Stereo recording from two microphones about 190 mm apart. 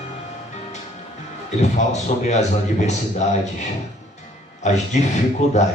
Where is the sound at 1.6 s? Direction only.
35° left (ahead or behind).